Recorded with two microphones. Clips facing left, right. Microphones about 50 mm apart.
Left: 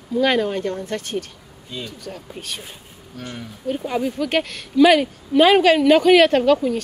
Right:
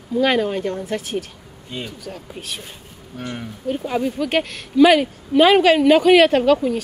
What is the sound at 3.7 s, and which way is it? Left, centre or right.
A woman's voice, centre.